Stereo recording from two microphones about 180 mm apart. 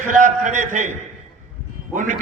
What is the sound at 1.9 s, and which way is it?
Speech, 45° right (ahead or behind).